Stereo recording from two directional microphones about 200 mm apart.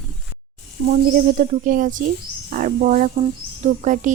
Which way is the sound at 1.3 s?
40° right (ahead or behind).